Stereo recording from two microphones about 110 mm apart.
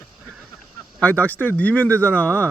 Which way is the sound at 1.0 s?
15° left (ahead or behind).